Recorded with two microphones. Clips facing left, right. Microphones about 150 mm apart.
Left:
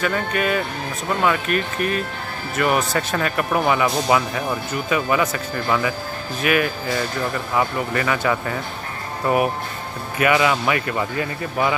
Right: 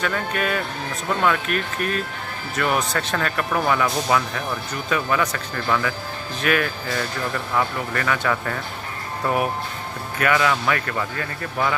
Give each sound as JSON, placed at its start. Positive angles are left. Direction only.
{"t": 0.0, "sound": "speech", "side_deg": 5}